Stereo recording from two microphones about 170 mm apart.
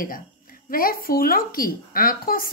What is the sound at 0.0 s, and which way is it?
Speech, 55° left (ahead or behind).